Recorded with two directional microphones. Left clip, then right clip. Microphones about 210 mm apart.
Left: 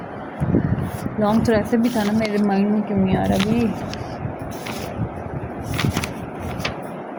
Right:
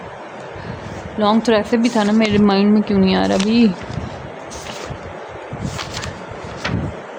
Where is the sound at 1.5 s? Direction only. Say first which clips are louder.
Right 3 dB; 15° right (ahead or behind).